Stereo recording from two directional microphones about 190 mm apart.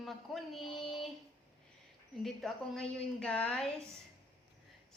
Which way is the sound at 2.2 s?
Centre (ahead or behind).